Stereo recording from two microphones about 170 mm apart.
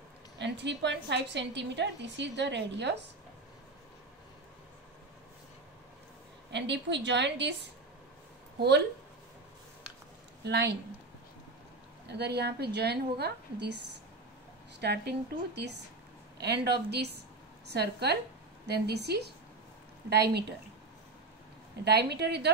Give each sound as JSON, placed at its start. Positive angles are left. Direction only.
{"t": 0.4, "sound": "a woman's voice", "side_deg": -90}
{"t": 6.5, "sound": "a woman's voice", "side_deg": -90}
{"t": 8.5, "sound": "speech", "side_deg": -80}
{"t": 10.4, "sound": "a woman's voice", "side_deg": -75}
{"t": 12.1, "sound": "a woman's voice", "side_deg": -75}
{"t": 14.8, "sound": "a woman's voice", "side_deg": -80}
{"t": 21.8, "sound": "a woman's voice", "side_deg": -75}